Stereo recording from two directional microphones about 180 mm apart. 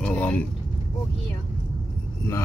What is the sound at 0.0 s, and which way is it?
Vehicle, 5° left (ahead or behind).